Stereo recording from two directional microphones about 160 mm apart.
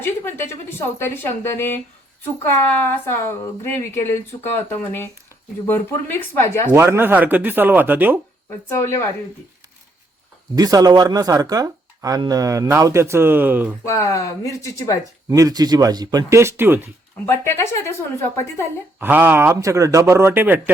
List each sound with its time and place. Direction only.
0.0 s a woman's voice: 15° left (ahead or behind)
6.7 s speech: 15° right (ahead or behind)
8.4 s a woman's voice: 15° left (ahead or behind)
10.5 s speech: 25° right (ahead or behind)
13.8 s speech: 20° left (ahead or behind)
15.3 s speech: 25° right (ahead or behind)
17.2 s a woman's voice: 15° left (ahead or behind)
18.9 s speech: 10° right (ahead or behind)